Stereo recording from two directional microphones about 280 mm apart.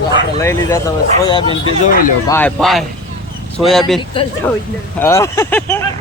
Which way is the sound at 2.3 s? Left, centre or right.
Centre.